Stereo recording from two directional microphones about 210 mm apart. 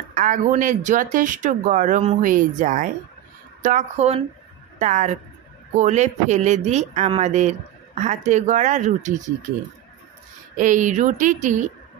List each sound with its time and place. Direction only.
0.1 s speech: 40° right (ahead or behind)
10.6 s speech: 35° right (ahead or behind)